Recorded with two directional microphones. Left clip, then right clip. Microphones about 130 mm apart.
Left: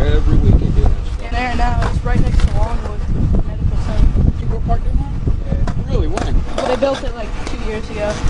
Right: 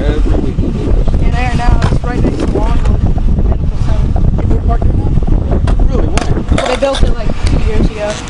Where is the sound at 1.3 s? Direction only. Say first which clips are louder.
Right 1 dB; 10° right (ahead or behind).